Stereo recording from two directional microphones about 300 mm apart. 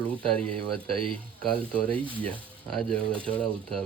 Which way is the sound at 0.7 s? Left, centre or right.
Centre.